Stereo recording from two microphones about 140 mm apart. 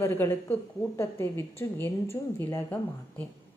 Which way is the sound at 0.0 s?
15° left (ahead or behind).